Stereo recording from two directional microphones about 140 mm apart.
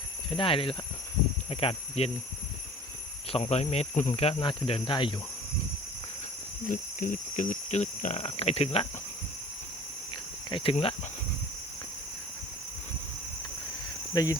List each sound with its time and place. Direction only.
0.3 s speech: 40° left (ahead or behind)
3.3 s speech: 50° left (ahead or behind)
6.7 s speech: 70° left (ahead or behind); by 8.9 s 45° left (ahead or behind)
10.5 s speech: 40° left (ahead or behind)
14.1 s speech: 25° left (ahead or behind)